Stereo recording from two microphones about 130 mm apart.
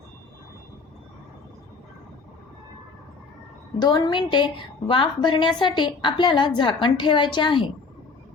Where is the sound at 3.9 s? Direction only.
35° left (ahead or behind).